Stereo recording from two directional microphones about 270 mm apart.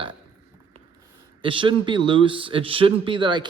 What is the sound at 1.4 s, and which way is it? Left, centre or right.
A man's voice, centre.